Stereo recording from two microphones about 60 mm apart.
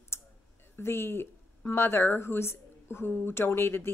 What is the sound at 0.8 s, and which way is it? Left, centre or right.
A woman's voice, left.